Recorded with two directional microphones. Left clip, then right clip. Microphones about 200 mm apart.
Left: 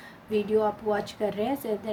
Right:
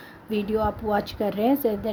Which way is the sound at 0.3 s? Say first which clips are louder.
Even; 55° right (ahead or behind).